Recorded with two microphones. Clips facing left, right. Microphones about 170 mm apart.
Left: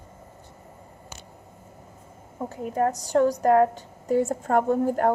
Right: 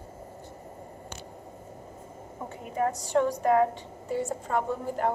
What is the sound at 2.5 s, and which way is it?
A woman's voice, 40° left (ahead or behind).